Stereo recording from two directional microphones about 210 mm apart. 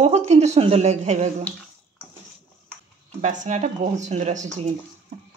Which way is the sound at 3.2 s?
35° right (ahead or behind).